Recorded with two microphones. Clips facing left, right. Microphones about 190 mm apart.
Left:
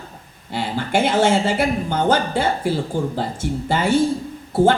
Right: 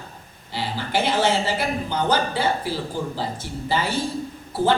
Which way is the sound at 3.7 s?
50° left (ahead or behind).